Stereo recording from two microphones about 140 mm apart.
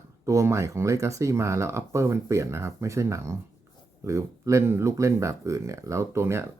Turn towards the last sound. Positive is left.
turn(degrees=-20)  # may be behind; listen again after turning